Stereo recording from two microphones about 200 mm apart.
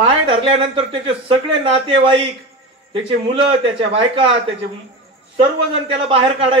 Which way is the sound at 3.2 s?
30° right (ahead or behind).